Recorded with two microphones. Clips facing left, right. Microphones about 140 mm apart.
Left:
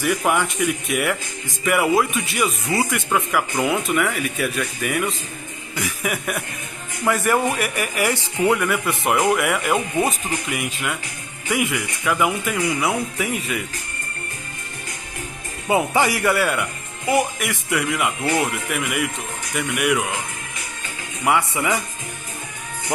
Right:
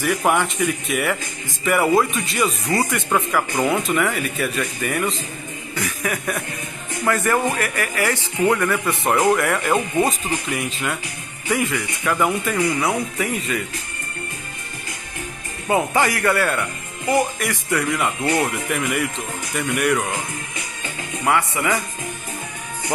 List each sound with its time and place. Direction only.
0.0 s speech: centre (ahead or behind)
12.0 s speech: 5° left (ahead or behind)
15.7 s speech: 10° left (ahead or behind)
21.3 s speech: 15° left (ahead or behind)